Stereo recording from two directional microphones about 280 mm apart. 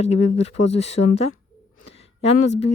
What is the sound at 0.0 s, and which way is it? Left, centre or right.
Speech, left.